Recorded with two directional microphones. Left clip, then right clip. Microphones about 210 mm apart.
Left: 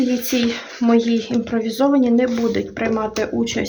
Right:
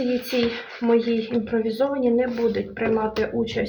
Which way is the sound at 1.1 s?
55° left (ahead or behind).